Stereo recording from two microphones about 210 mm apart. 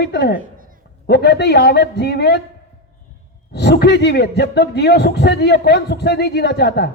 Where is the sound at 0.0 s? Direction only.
55° left (ahead or behind).